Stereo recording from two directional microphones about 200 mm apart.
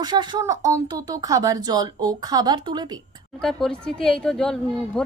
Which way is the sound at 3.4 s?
5° left (ahead or behind).